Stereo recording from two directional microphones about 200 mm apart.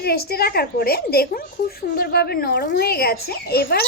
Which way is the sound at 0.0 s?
50° left (ahead or behind).